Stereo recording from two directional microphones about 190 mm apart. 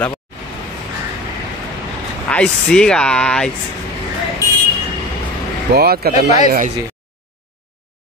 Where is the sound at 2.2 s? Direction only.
5° left (ahead or behind).